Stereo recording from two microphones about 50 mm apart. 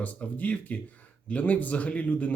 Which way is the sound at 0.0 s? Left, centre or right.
Left.